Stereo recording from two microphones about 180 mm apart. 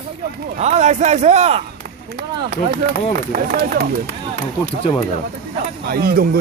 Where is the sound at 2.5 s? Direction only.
55° right (ahead or behind).